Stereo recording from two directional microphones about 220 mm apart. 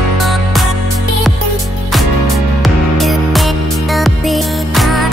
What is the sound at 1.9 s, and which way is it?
Music, centre (ahead or behind).